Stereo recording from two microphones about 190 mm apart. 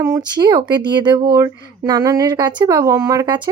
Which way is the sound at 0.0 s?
20° right (ahead or behind).